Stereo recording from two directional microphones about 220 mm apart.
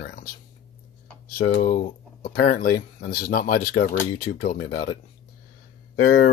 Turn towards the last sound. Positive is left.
turn(degrees=40)  # may be behind; listen again after turning